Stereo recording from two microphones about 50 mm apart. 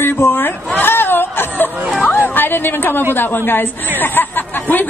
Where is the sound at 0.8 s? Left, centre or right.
Left.